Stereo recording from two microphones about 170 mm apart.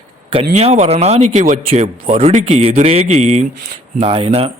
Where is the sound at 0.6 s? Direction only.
40° right (ahead or behind).